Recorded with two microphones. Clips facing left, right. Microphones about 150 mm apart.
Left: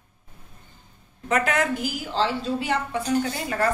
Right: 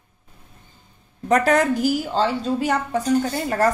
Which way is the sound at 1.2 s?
40° right (ahead or behind).